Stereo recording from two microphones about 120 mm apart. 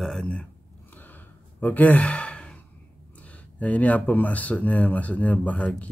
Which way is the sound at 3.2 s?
10° left (ahead or behind).